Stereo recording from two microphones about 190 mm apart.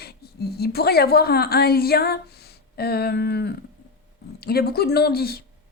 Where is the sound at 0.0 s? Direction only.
55° left (ahead or behind).